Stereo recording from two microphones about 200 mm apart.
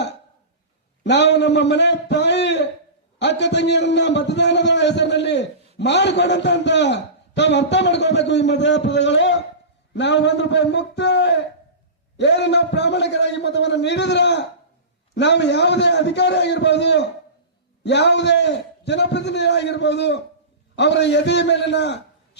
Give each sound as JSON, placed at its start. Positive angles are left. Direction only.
{"t": 1.0, "sound": "a man's voice", "side_deg": 60}